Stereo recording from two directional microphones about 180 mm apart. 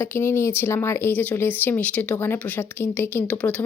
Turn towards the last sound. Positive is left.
turn(degrees=10)  # may be behind; listen again after turning